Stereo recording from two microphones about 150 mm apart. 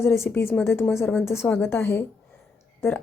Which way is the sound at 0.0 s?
15° left (ahead or behind).